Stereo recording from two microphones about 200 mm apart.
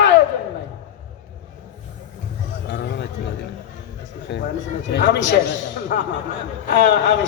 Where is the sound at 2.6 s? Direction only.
55° left (ahead or behind).